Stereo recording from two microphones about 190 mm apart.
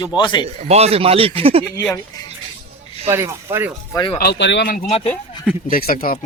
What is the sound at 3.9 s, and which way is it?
Speech, 25° left (ahead or behind).